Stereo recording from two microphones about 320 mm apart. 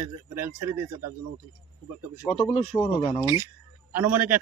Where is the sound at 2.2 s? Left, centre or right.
Centre.